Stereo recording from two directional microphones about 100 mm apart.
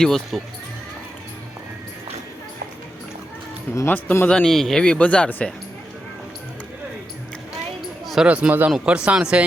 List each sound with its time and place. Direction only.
0.0 s speech: 5° left (ahead or behind)
3.8 s speech: 20° left (ahead or behind)
4.3 s speech: 5° left (ahead or behind)
8.0 s a sound: centre (ahead or behind)
8.3 s speech: 15° right (ahead or behind)